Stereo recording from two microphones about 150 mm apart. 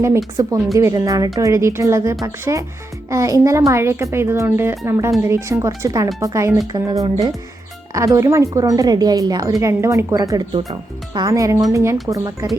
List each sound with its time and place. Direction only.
0.3 s speech: 20° right (ahead or behind)